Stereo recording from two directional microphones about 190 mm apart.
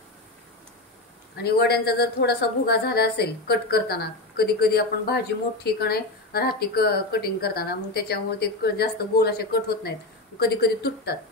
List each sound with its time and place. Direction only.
1.4 s a woman's voice: 55° left (ahead or behind)